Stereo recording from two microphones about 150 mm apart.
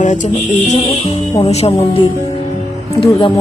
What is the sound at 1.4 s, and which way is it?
Speech, 45° left (ahead or behind).